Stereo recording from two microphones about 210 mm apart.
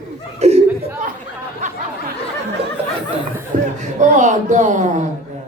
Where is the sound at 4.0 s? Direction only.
35° right (ahead or behind).